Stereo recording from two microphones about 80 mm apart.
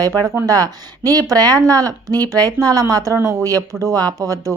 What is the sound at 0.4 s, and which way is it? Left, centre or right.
A woman's voice, right.